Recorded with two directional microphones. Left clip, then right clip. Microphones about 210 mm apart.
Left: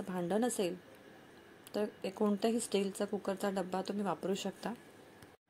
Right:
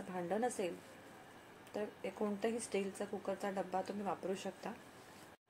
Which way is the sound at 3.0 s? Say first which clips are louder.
Left 5 dB; 40° left (ahead or behind).